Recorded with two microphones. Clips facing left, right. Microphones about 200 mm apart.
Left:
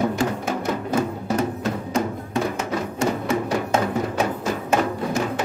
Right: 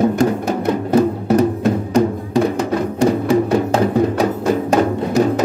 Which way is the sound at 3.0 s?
35° right (ahead or behind).